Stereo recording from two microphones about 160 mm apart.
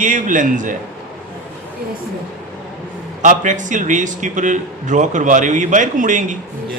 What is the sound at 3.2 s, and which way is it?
A man's voice, 50° right (ahead or behind).